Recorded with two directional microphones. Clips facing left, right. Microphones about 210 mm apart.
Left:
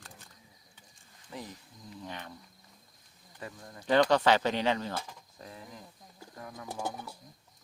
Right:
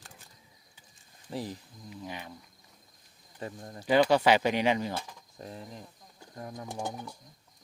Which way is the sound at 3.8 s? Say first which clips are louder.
Right 1 dB; 10° right (ahead or behind).